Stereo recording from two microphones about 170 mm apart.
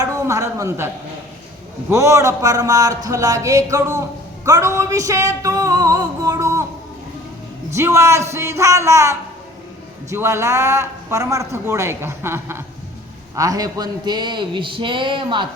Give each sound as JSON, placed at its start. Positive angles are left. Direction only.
{"t": 0.0, "sound": "a man's voice", "side_deg": -15}
{"t": 1.9, "sound": "speech", "side_deg": -15}
{"t": 4.4, "sound": "a sound", "side_deg": -20}
{"t": 7.8, "sound": "a man's voice", "side_deg": -15}